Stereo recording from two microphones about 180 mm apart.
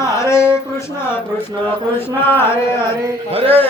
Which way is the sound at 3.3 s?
30° right (ahead or behind).